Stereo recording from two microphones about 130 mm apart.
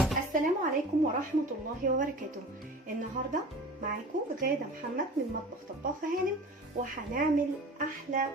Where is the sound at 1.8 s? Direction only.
90° right.